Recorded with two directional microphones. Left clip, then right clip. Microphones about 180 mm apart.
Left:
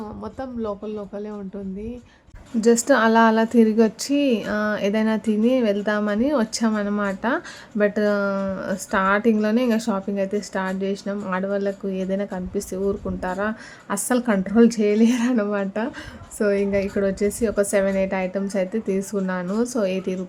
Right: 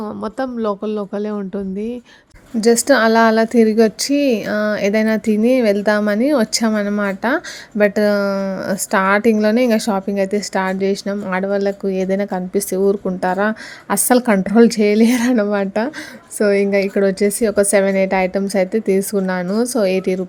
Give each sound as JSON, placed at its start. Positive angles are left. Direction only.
{"t": 0.0, "sound": "speech", "side_deg": -35}
{"t": 2.6, "sound": "speech", "side_deg": -20}